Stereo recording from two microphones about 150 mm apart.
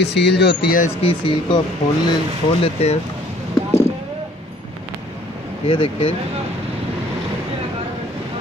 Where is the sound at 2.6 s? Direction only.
45° left (ahead or behind).